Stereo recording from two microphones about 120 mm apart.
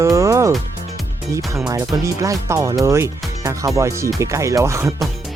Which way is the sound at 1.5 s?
30° right (ahead or behind).